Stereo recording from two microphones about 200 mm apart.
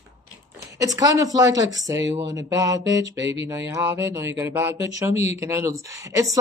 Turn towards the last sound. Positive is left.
turn(degrees=-15)  # may be behind; listen again after turning